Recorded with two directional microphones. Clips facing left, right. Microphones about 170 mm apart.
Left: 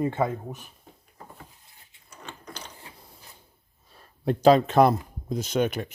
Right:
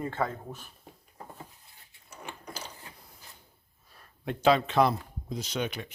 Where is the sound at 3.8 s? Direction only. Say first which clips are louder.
Left 9 dB; 30° left (ahead or behind).